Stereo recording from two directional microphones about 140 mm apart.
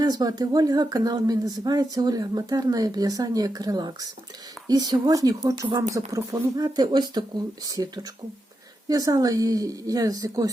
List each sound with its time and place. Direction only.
0.0 s speech: 30° right (ahead or behind)